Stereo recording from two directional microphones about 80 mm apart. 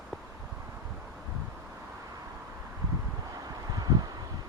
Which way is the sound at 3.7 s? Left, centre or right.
Right.